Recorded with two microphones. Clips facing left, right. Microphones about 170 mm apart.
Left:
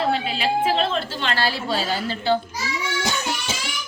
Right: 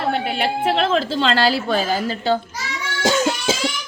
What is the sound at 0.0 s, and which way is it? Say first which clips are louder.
A woman's voice: right 1 dB; 65° right (ahead or behind).